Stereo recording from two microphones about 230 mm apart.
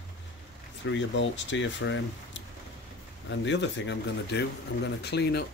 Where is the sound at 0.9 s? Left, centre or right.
Left.